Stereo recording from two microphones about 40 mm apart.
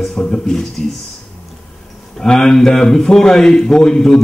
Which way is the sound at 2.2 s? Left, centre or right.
Centre.